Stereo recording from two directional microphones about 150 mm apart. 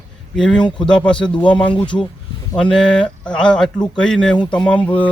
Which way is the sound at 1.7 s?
35° left (ahead or behind).